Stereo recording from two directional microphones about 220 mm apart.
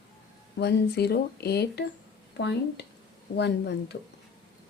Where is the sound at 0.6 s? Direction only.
50° left (ahead or behind).